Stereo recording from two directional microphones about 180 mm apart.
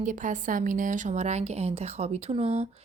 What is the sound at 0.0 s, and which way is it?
A woman's voice, 45° right (ahead or behind).